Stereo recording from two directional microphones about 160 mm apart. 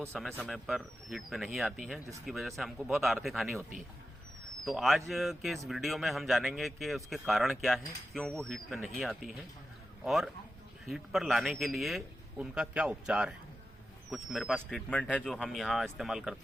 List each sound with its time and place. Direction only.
0.1 s speech: 5° left (ahead or behind)
4.6 s speech: centre (ahead or behind)